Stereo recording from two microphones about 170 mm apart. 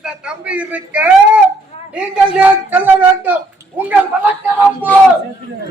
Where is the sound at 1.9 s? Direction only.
10° right (ahead or behind).